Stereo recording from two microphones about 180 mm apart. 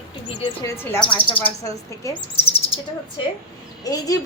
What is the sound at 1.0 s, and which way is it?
Speech, 25° left (ahead or behind).